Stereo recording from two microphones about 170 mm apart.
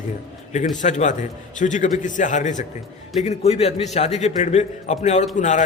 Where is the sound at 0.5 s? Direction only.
45° left (ahead or behind).